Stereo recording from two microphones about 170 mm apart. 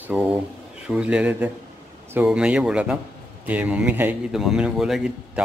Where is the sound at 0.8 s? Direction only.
5° right (ahead or behind).